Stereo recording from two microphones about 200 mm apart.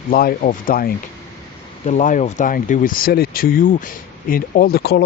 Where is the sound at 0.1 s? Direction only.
45° left (ahead or behind).